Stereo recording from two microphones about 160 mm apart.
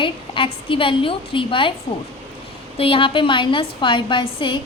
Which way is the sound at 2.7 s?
35° left (ahead or behind).